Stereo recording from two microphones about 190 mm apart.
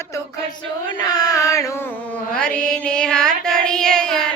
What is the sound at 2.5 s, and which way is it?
Child singing, 5° left (ahead or behind).